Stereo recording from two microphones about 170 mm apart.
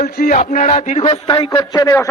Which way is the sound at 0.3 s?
45° left (ahead or behind).